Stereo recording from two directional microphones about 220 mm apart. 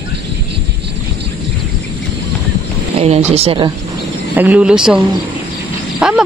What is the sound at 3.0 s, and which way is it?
Speech, 30° right (ahead or behind).